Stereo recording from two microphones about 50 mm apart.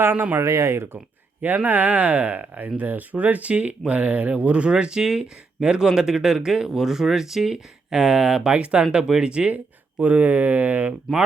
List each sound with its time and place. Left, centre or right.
0.0 s speech: right
0.4 s speech: right
1.4 s speech: right; by 8.4 s centre
8.4 s speech: right
10.0 s speech: right